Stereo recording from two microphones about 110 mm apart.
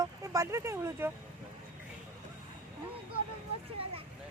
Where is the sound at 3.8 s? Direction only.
60° right (ahead or behind).